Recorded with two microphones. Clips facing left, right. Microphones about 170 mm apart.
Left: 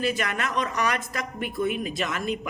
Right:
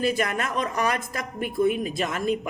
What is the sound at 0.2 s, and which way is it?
Speech, 30° right (ahead or behind).